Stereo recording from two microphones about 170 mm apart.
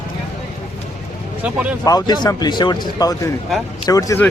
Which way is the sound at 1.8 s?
25° left (ahead or behind).